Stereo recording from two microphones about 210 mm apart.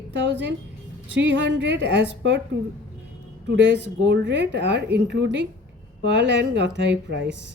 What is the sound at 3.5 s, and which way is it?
A woman's voice, 60° right (ahead or behind).